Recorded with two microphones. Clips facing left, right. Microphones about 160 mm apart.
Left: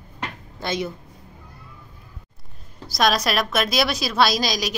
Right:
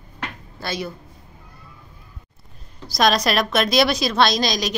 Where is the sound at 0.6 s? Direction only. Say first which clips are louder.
Left 2 dB; 20° left (ahead or behind).